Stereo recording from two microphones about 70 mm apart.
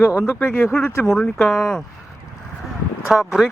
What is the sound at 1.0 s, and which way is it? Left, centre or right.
Speech, centre.